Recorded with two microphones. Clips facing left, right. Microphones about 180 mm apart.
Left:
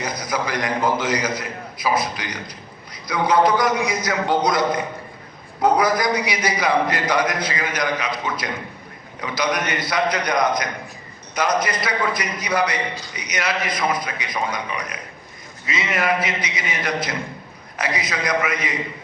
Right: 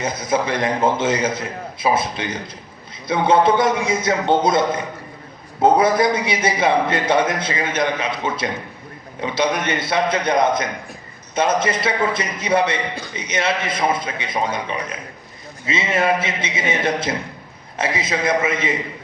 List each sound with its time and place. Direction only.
0.0 s a man's voice: 25° right (ahead or behind)